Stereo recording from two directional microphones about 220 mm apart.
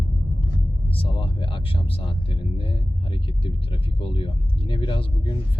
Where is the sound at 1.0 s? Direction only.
25° left (ahead or behind).